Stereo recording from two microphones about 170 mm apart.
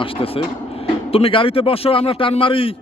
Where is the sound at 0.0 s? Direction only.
35° left (ahead or behind).